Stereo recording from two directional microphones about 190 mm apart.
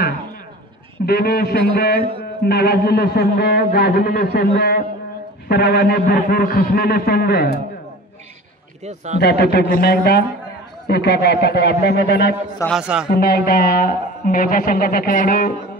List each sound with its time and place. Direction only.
1.0 s a man's voice: 55° left (ahead or behind)
8.8 s a man's voice: 35° right (ahead or behind)
9.2 s a man's voice: 60° left (ahead or behind)
12.6 s a man's voice: 5° right (ahead or behind)
13.1 s a man's voice: 55° left (ahead or behind)